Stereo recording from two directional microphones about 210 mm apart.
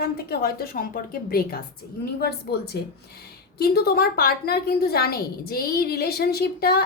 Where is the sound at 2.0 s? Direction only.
50° left (ahead or behind).